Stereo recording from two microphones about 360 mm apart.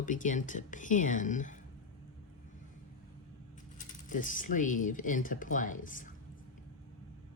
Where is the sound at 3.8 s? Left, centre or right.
Left.